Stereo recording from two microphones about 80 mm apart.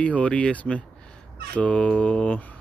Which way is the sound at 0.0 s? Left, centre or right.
Centre.